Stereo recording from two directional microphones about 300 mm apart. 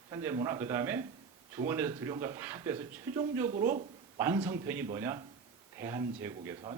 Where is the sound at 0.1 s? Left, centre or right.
Centre.